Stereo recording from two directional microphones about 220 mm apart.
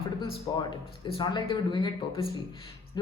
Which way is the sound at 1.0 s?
20° left (ahead or behind).